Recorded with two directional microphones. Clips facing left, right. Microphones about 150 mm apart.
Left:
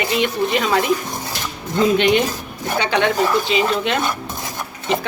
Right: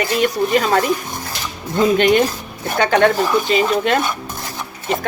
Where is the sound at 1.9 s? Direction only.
45° right (ahead or behind).